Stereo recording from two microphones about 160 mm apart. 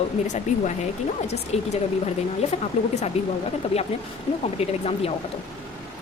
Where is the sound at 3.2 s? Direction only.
40° left (ahead or behind).